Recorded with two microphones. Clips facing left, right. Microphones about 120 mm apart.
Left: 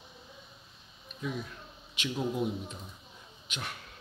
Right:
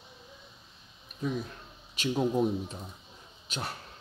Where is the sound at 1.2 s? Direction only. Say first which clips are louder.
Right 4 dB; 35° right (ahead or behind).